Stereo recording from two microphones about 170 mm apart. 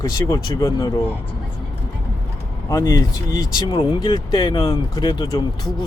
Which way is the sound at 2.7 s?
20° left (ahead or behind).